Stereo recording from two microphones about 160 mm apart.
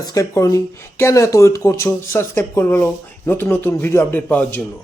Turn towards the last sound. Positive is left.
turn(degrees=10)  # may be behind; listen again after turning